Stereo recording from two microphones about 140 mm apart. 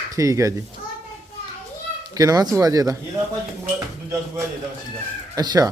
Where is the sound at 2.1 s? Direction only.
25° right (ahead or behind).